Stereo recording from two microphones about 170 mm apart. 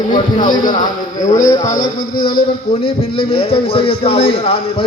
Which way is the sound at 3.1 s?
35° left (ahead or behind).